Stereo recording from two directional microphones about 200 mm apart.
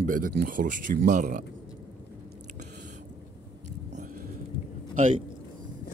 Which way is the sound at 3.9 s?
35° right (ahead or behind).